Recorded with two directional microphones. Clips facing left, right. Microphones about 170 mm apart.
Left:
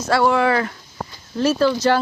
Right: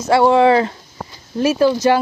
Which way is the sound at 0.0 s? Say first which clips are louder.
Right 5 dB; 25° right (ahead or behind).